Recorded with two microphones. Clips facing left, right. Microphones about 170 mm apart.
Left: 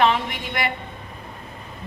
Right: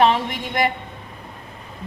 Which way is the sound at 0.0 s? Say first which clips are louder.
Right 2 dB; 40° right (ahead or behind).